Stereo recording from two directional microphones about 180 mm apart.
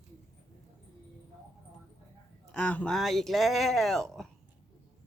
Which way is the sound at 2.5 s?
5° left (ahead or behind).